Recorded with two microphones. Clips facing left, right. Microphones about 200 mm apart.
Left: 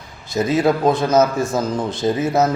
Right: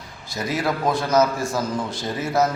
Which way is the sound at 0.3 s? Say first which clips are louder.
Left 8 dB; 20° left (ahead or behind).